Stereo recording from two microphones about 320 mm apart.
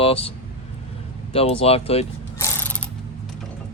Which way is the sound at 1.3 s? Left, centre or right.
Centre.